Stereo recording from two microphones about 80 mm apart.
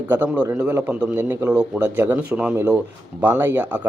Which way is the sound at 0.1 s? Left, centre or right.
Right.